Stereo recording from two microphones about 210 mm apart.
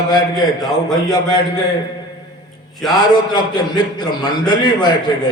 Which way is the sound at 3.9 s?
20° left (ahead or behind).